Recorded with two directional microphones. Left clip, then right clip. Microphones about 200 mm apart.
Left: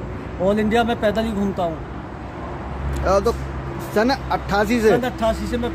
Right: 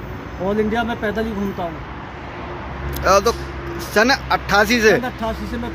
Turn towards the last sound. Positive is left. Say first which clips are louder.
# left 3 dB
turn(degrees=30)  # may be behind; listen again after turning